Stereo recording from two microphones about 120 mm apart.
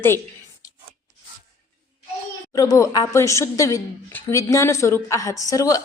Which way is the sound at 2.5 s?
30° left (ahead or behind).